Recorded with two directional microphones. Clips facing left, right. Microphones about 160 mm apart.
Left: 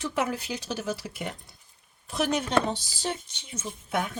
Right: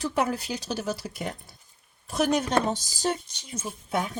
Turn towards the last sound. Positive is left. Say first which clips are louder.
# right 1 dB
turn(degrees=-35)  # may be behind; listen again after turning